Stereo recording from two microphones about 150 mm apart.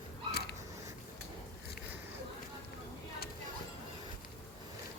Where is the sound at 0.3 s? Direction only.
90° left.